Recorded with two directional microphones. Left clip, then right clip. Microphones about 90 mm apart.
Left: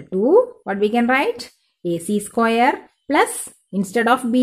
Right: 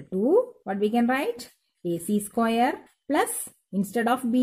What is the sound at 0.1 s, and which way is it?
Speech, 25° right (ahead or behind).